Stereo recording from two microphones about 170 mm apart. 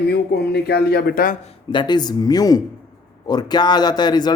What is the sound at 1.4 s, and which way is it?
Speech, 30° left (ahead or behind).